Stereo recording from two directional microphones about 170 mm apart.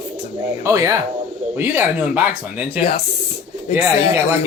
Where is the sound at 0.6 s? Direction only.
15° right (ahead or behind).